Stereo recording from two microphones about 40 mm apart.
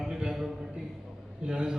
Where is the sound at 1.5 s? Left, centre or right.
Right.